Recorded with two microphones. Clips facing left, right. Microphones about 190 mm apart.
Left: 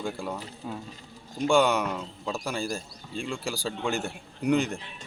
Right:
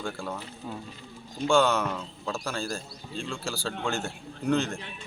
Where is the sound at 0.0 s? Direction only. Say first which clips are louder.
Left 2 dB; 15° left (ahead or behind).